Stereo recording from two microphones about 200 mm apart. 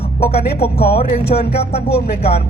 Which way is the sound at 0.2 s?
30° left (ahead or behind).